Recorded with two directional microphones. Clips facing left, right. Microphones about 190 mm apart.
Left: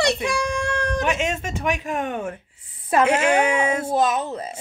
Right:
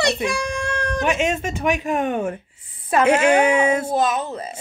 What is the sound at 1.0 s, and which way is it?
Speech, 10° right (ahead or behind).